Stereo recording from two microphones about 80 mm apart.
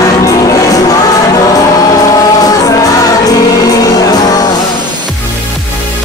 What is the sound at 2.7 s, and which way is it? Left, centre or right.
Music, left.